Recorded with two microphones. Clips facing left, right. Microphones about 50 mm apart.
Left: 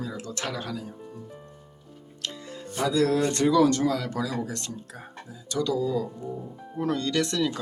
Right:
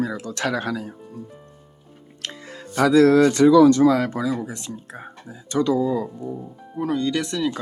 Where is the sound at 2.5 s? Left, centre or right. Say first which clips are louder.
Right 9 dB; right.